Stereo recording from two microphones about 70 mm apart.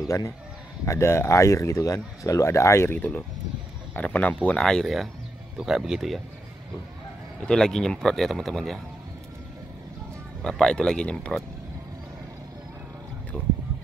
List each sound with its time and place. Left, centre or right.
0.8 s speech: left
2.9 s speech: left
4.6 s speech: centre
7.4 s speech: centre
10.4 s speech: centre